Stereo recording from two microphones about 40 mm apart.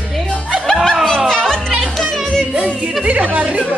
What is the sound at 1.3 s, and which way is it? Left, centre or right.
Music, centre.